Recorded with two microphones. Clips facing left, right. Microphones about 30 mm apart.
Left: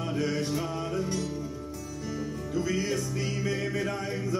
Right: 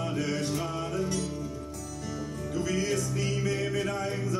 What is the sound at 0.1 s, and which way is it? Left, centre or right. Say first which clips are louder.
Music: left 1 dB; centre.